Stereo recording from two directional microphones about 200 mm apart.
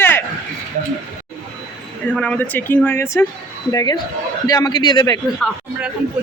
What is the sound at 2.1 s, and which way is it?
A man's voice, 5° left (ahead or behind).